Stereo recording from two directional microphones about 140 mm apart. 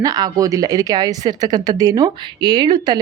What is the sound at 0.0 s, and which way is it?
Speech, 25° right (ahead or behind).